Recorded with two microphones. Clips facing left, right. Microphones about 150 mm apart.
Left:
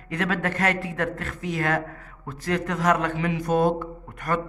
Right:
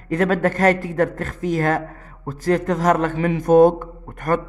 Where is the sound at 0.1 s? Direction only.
40° right (ahead or behind).